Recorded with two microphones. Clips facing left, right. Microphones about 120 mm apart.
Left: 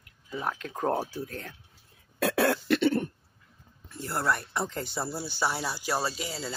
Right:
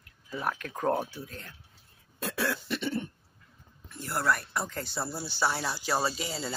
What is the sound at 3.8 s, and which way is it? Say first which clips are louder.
Speech: even; 30° left (ahead or behind).